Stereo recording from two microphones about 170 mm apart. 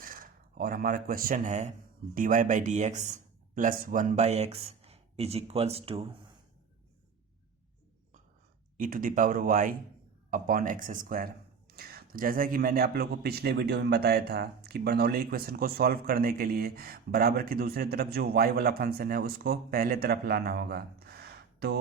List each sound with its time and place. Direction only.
0.0 s a man's voice: 55° right (ahead or behind); by 6.1 s 35° right (ahead or behind)
8.8 s a man's voice: 55° right (ahead or behind); by 21.8 s 70° right (ahead or behind)